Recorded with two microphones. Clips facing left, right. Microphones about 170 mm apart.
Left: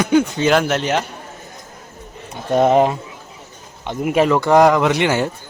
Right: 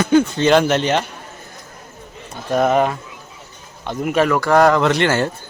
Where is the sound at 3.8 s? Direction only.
10° left (ahead or behind).